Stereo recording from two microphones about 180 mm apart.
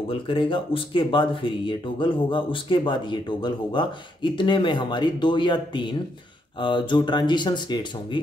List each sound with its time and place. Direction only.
0.1 s speech: 30° left (ahead or behind)